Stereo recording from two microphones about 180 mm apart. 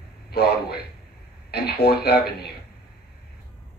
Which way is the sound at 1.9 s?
60° left (ahead or behind).